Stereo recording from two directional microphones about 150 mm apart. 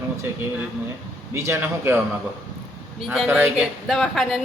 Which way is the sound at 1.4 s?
15° right (ahead or behind).